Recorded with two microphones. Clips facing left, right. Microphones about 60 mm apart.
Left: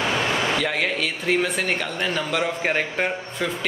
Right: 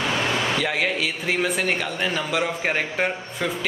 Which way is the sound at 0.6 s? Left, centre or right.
Centre.